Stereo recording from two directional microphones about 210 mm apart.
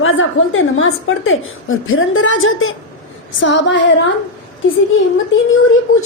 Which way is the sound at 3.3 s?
60° left (ahead or behind).